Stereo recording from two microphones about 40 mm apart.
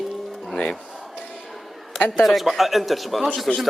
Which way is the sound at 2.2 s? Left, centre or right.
Centre.